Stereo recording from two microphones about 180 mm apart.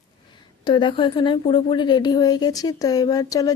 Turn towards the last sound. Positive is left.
turn(degrees=20)  # may be behind; listen again after turning